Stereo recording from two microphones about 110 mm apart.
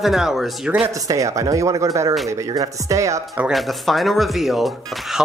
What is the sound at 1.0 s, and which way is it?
Speech, 30° right (ahead or behind).